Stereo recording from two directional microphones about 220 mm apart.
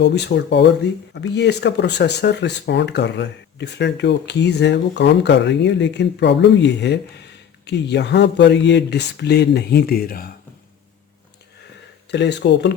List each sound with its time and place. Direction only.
0.0 s speech: 50° left (ahead or behind)
12.1 s speech: 50° left (ahead or behind)